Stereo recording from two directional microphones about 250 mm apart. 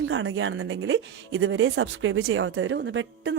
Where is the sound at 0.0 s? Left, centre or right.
Right.